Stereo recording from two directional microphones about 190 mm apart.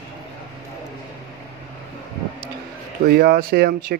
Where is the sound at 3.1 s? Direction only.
50° right (ahead or behind).